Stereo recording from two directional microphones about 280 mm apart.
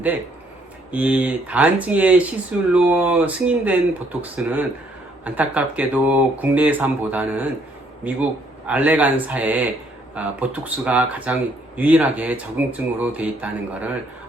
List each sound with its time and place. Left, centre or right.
0.9 s speech: centre